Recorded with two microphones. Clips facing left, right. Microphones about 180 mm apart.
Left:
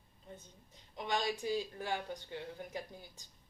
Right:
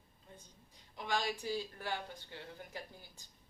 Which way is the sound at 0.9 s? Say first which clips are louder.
Left 1 dB; 20° left (ahead or behind).